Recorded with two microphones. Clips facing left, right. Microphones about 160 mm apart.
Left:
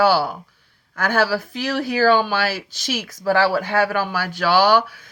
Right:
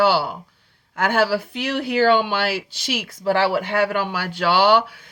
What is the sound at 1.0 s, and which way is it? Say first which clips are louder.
Speech: right 1 dB; 25° right (ahead or behind).